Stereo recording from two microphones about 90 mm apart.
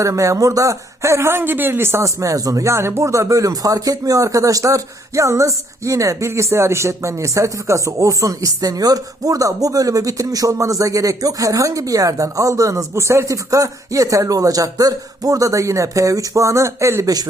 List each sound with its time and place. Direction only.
0.0 s speech: 35° right (ahead or behind)